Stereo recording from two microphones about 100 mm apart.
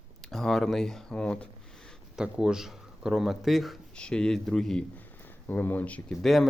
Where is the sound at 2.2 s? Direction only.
5° right (ahead or behind).